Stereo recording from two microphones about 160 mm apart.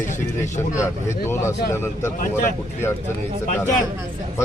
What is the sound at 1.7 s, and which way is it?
Speech, 15° left (ahead or behind).